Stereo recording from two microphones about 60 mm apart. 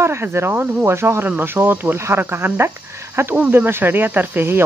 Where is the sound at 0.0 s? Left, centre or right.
Right.